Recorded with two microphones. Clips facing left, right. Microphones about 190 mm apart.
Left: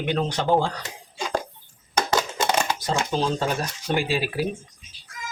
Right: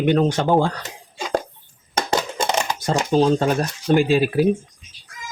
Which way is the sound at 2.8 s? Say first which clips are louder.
Right 7 dB; 50° right (ahead or behind).